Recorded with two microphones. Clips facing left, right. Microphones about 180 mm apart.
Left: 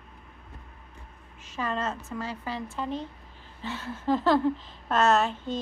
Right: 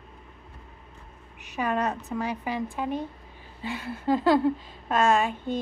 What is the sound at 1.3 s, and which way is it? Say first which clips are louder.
Speech: right 4 dB; 15° right (ahead or behind).